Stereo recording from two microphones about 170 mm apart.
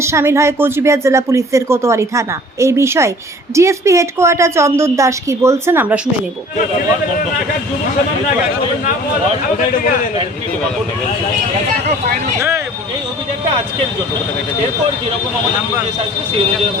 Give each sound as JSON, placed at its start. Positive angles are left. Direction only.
{"t": 0.0, "sound": "speech", "side_deg": -15}
{"t": 9.6, "sound": "a man's voice", "side_deg": 55}